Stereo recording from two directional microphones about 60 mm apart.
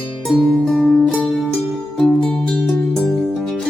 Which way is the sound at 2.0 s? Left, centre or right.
Centre.